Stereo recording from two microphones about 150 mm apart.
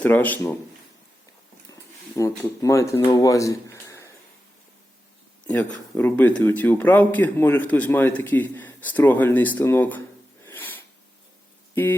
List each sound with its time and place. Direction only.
0.0 s speech: 10° left (ahead or behind)
1.7 s speech: 20° left (ahead or behind)
5.9 s speech: 10° left (ahead or behind)
10.4 s a sound: 15° left (ahead or behind)